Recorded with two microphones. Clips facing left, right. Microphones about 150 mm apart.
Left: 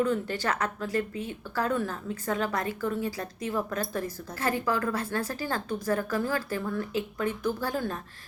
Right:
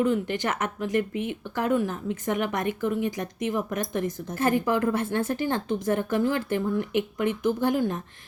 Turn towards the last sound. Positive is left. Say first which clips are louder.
# right 6 dB
turn(degrees=-20)  # may be behind; listen again after turning